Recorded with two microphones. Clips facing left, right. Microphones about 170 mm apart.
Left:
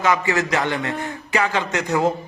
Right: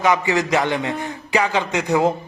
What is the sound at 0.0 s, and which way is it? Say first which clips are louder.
A man's voice: right 2 dB; 20° right (ahead or behind).